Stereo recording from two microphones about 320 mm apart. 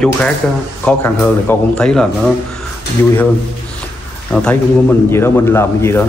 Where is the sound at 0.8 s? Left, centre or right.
Centre.